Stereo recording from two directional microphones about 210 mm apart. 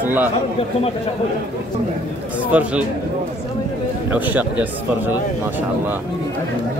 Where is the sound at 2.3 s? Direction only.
5° right (ahead or behind).